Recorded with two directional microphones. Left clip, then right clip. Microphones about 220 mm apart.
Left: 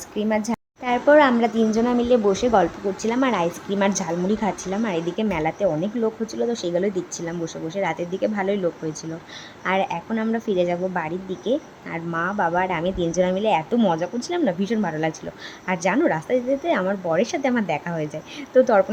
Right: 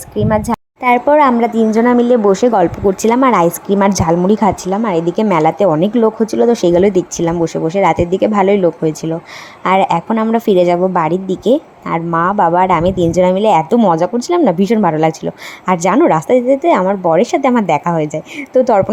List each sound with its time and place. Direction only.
0.2 s a woman's voice: 20° right (ahead or behind)